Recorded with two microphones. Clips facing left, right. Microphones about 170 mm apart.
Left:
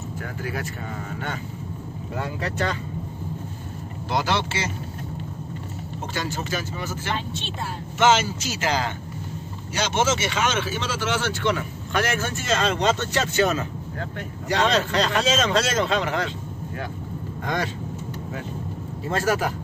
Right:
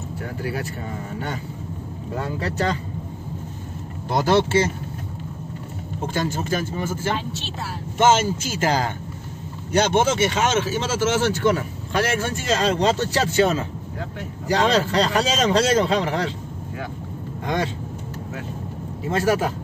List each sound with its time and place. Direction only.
0.4 s speech: 35° right (ahead or behind)
2.1 s speech: 35° right (ahead or behind)
4.1 s speech: 50° right (ahead or behind)
6.1 s speech: 50° right (ahead or behind); by 16.3 s 30° right (ahead or behind)
19.0 s a man's voice: 20° right (ahead or behind)